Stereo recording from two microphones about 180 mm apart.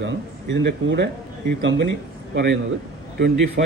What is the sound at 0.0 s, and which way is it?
Speech, 80° right.